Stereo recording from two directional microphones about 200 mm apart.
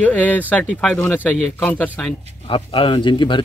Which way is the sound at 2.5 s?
25° left (ahead or behind).